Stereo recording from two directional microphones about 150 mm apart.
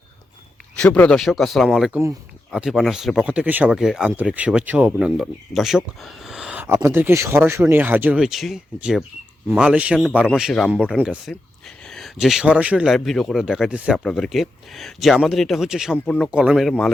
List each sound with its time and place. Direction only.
0.8 s speech: 10° left (ahead or behind)
1.9 s a man's voice: 15° right (ahead or behind)
2.5 s a man's voice: 5° right (ahead or behind)
16.0 s a man's voice: 5° left (ahead or behind)
16.3 s speech: 5° right (ahead or behind)